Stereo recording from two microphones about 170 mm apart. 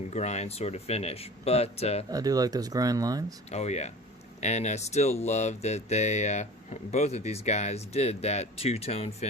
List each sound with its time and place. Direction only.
0.1 s speech: 40° left (ahead or behind)
2.0 s speech: 20° right (ahead or behind)
3.5 s speech: 40° left (ahead or behind)